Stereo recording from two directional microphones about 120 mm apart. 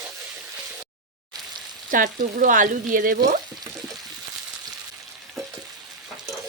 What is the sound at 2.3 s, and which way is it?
Speech, 90° right.